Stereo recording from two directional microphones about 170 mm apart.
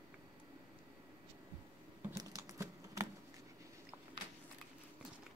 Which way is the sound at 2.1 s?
20° right (ahead or behind).